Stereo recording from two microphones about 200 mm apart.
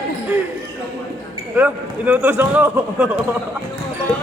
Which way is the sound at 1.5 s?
10° right (ahead or behind).